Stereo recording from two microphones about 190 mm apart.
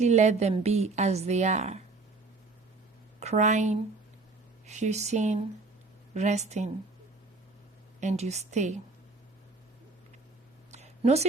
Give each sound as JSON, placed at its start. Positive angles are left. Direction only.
{"t": 0.0, "sound": "a woman's voice", "side_deg": -35}
{"t": 3.2, "sound": "a woman's voice", "side_deg": -35}
{"t": 8.0, "sound": "a woman's voice", "side_deg": -35}
{"t": 10.7, "sound": "a sound", "side_deg": -35}